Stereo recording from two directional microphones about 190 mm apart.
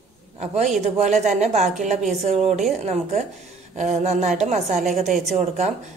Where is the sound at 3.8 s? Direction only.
40° right (ahead or behind).